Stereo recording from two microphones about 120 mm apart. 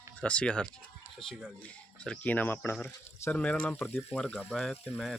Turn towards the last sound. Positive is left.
turn(degrees=10)  # may be behind; listen again after turning